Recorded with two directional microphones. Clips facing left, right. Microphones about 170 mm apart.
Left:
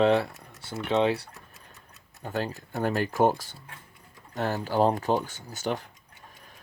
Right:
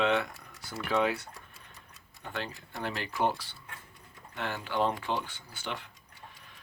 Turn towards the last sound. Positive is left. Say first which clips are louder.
# left 9 dB
turn(degrees=40)  # may be behind; listen again after turning